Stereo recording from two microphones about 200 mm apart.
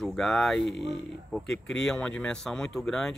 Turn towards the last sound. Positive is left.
turn(degrees=5)  # may be behind; listen again after turning